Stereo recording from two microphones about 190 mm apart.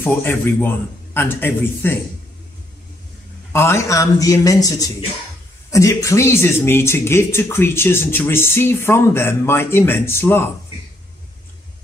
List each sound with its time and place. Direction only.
0.0 s speech: 10° left (ahead or behind)
3.5 s speech: 15° left (ahead or behind)